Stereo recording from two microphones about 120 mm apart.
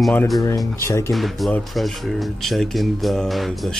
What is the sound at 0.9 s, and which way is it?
Speech, 25° left (ahead or behind).